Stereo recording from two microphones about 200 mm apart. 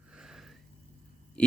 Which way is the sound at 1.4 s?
5° left (ahead or behind).